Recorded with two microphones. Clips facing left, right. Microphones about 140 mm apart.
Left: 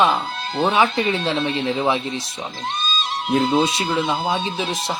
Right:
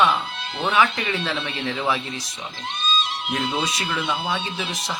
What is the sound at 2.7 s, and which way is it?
Music, 35° left (ahead or behind).